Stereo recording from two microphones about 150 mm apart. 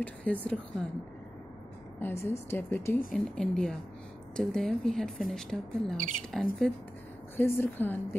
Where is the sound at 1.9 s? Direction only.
15° left (ahead or behind).